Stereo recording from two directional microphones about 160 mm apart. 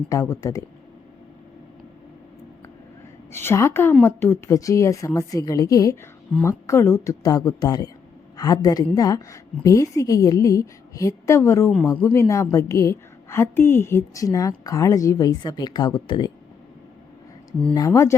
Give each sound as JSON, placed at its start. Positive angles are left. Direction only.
{"t": 0.1, "sound": "a woman's voice", "side_deg": 20}
{"t": 3.3, "sound": "a woman's voice", "side_deg": 15}
{"t": 17.7, "sound": "a woman's voice", "side_deg": 20}